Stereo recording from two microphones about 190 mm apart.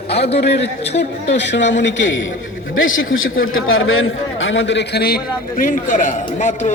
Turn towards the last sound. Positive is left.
turn(degrees=40)  # may be behind; listen again after turning